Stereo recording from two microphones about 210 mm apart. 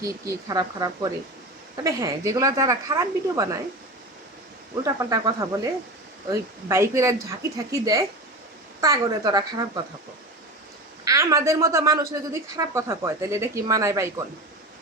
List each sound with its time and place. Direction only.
0.0 s a woman's voice: 15° right (ahead or behind)
4.8 s a woman's voice: 15° right (ahead or behind)
11.0 s a woman's voice: 15° right (ahead or behind)